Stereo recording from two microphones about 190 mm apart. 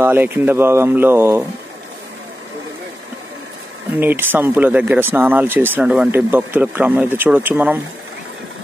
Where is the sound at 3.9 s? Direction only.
10° right (ahead or behind).